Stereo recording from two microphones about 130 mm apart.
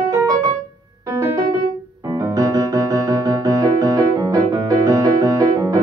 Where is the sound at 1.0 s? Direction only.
20° right (ahead or behind).